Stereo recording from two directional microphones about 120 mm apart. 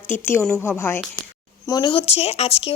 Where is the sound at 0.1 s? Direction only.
20° left (ahead or behind).